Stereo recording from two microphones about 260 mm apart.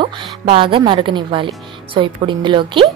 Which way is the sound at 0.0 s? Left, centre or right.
Centre.